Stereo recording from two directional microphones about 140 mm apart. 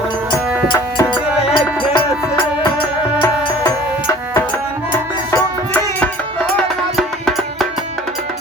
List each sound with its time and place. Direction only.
1.5 s music: 35° left (ahead or behind)
6.4 s music: centre (ahead or behind)